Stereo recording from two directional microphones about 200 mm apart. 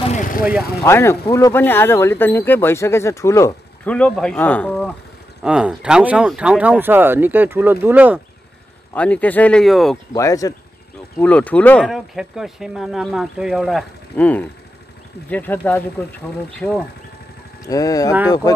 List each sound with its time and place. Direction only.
0.1 s speech: 40° left (ahead or behind)
0.8 s speech: 15° left (ahead or behind)
5.4 s speech: 5° right (ahead or behind)
8.9 s speech: 5° left (ahead or behind)
10.1 s speech: 15° left (ahead or behind)
17.6 s speech: 20° left (ahead or behind)